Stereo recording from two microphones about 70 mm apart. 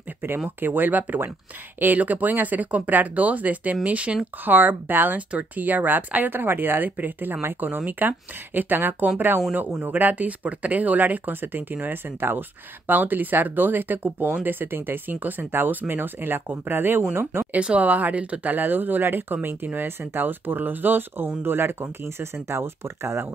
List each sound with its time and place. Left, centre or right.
0.2 s speech: right
17.6 s speech: centre; by 23.2 s right